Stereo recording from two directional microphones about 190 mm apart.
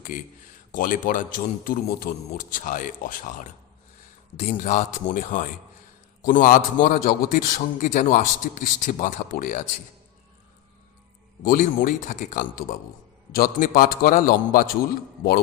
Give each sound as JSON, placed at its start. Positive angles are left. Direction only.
{"t": 0.0, "sound": "a man's voice", "side_deg": 45}
{"t": 11.4, "sound": "a man's voice", "side_deg": 45}